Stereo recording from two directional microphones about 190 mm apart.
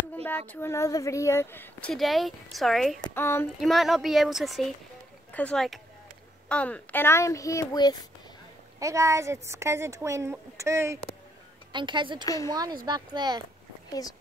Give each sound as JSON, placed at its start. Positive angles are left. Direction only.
{"t": 0.1, "sound": "speech", "side_deg": 10}
{"t": 3.2, "sound": "speech", "side_deg": 10}
{"t": 3.6, "sound": "speech", "side_deg": 0}
{"t": 8.7, "sound": "a woman's voice", "side_deg": -15}